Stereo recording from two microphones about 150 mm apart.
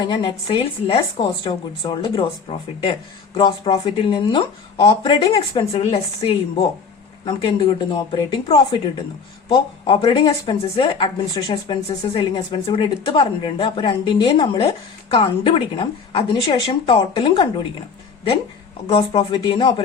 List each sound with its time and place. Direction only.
0.0 s speech: 30° left (ahead or behind)
18.9 s speech: 35° left (ahead or behind)